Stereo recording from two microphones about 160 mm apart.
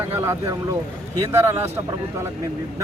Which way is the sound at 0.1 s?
15° right (ahead or behind).